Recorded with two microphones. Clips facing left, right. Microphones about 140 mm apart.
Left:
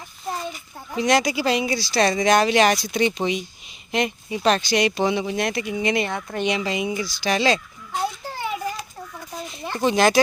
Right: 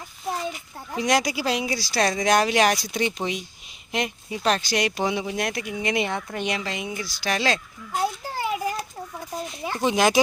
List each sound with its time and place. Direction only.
0.9 s speech: 5° right (ahead or behind)
5.9 s speech: 15° right (ahead or behind)
6.3 s speech: 5° right (ahead or behind)
7.2 s a sound: centre (ahead or behind)
9.6 s speech: 10° right (ahead or behind)